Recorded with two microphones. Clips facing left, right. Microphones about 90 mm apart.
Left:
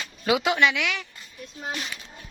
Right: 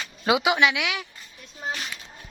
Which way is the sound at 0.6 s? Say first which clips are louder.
Even; 5° right (ahead or behind).